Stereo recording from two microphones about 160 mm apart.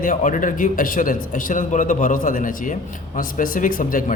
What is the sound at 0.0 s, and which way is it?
A man's voice, 55° left (ahead or behind).